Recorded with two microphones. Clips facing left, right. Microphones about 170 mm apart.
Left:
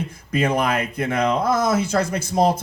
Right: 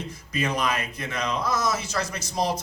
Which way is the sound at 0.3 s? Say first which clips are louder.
Left 6 dB; 55° left (ahead or behind).